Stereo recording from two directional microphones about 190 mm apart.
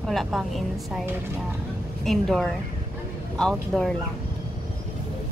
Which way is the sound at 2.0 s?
Centre (ahead or behind).